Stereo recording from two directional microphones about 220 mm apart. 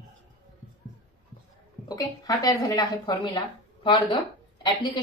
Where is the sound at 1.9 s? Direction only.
15° left (ahead or behind).